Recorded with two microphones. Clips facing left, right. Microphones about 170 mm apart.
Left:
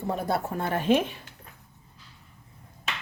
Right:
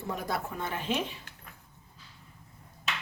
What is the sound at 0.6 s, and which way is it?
Speech, 50° left (ahead or behind).